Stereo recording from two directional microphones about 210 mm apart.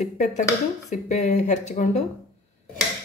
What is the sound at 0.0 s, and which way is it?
Speech, 35° left (ahead or behind).